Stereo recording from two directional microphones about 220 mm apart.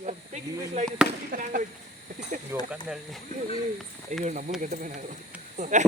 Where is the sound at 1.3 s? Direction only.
35° right (ahead or behind).